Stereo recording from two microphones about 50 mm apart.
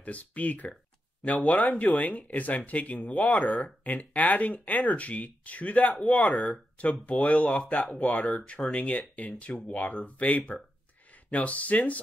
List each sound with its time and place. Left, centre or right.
0.0 s speech: left